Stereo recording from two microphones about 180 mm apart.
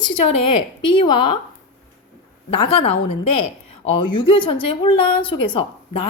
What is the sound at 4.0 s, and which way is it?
Speech, 25° left (ahead or behind).